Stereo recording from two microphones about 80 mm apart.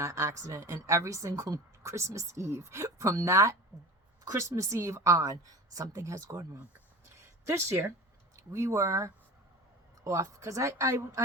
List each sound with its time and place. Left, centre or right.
0.0 s a woman's voice: right